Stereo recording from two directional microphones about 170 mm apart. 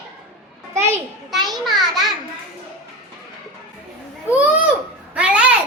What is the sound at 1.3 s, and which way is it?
Speech, centre (ahead or behind).